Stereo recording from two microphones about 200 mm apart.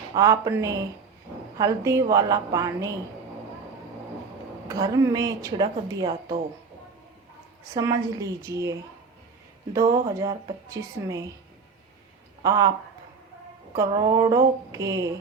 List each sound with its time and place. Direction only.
0.1 s speech: 15° right (ahead or behind)
4.7 s speech: 15° right (ahead or behind)
7.7 s speech: 15° right (ahead or behind)
9.7 s speech: 15° right (ahead or behind)
12.4 s speech: 20° right (ahead or behind)
13.7 s speech: 15° right (ahead or behind)